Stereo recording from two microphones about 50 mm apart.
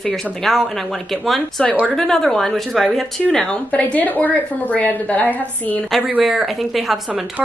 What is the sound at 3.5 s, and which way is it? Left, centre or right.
A woman's voice, left.